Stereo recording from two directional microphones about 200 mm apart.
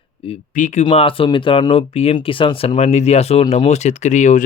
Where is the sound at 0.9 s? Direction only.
25° left (ahead or behind).